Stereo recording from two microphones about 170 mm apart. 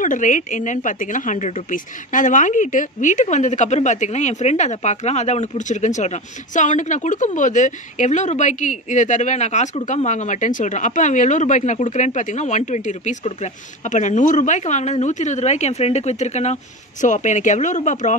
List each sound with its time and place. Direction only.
0.0 s a woman's voice: 50° left (ahead or behind)